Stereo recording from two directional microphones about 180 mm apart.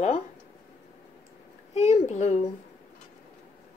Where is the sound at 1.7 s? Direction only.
40° left (ahead or behind).